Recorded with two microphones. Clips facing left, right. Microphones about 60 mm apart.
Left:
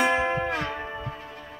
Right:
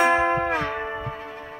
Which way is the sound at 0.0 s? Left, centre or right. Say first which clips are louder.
Right 4 dB; right.